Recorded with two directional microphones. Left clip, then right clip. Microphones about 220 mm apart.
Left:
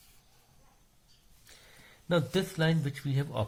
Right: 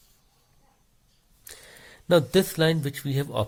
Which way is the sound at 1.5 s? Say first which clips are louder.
Right 8 dB; 50° right (ahead or behind).